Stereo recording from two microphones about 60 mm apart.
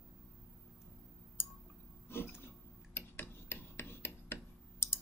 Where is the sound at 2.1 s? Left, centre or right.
Left.